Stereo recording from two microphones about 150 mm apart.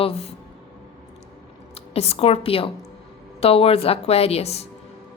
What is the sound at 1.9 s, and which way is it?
A woman's voice, 45° left (ahead or behind).